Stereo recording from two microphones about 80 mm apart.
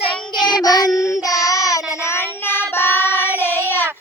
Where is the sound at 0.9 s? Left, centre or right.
Left.